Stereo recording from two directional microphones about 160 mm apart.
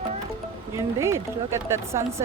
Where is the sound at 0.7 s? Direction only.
15° right (ahead or behind).